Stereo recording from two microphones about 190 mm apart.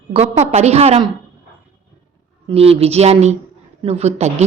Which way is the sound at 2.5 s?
30° right (ahead or behind).